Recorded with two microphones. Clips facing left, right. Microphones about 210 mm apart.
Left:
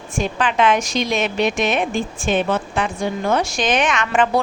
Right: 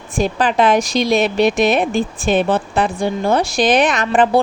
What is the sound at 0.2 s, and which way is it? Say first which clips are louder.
A woman's voice: right 3 dB; 35° right (ahead or behind).